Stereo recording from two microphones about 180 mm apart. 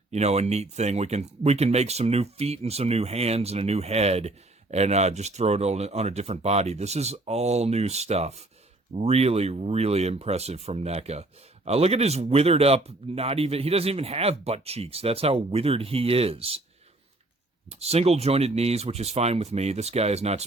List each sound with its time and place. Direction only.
0.1 s speech: 35° right (ahead or behind)
17.7 s speech: 35° right (ahead or behind)